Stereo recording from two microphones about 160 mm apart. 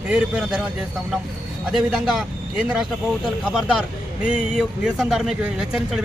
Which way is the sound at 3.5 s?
5° right (ahead or behind).